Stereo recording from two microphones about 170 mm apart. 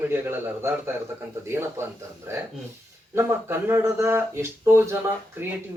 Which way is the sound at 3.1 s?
15° right (ahead or behind).